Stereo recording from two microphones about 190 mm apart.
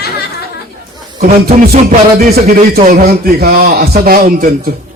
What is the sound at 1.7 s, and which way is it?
A man's voice, 50° right (ahead or behind).